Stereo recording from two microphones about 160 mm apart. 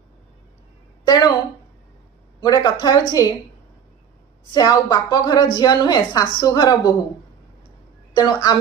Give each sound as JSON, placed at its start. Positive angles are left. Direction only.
{"t": 1.0, "sound": "a woman's voice", "side_deg": 25}
{"t": 2.4, "sound": "a woman's voice", "side_deg": 25}
{"t": 4.6, "sound": "a woman's voice", "side_deg": 25}
{"t": 8.1, "sound": "a woman's voice", "side_deg": 25}